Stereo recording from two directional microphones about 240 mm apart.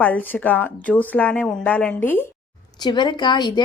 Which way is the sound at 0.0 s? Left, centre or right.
Centre.